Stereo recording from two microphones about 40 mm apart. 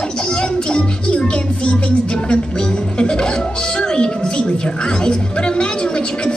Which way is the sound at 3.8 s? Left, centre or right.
Left.